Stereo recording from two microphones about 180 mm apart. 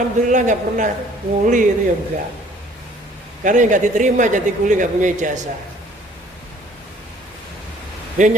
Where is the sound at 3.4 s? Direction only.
45° right (ahead or behind).